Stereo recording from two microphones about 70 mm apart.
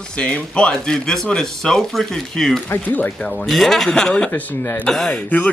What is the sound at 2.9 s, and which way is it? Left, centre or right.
Speech, left.